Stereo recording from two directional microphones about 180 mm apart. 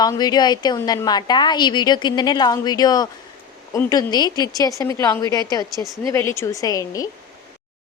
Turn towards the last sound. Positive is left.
turn(degrees=20)  # may be behind; listen again after turning